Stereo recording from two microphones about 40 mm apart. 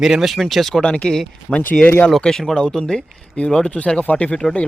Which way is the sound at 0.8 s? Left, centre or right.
Left.